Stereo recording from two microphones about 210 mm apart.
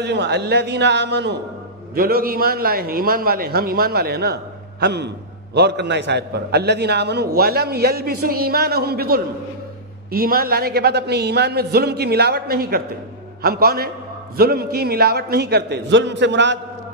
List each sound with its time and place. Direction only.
0.0 s a man's voice: 55° right (ahead or behind)